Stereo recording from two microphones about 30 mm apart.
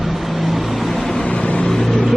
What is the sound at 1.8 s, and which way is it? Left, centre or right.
Vehicle, centre.